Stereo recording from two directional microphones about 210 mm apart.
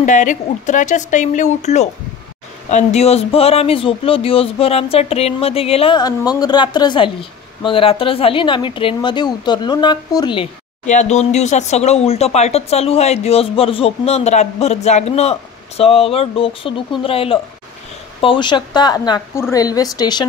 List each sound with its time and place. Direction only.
0.0 s speech: 35° left (ahead or behind); by 20.2 s 20° left (ahead or behind)